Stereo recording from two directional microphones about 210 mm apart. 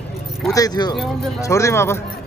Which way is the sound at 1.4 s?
15° left (ahead or behind).